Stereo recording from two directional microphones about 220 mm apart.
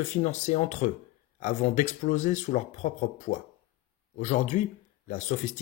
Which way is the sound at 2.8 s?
35° left (ahead or behind).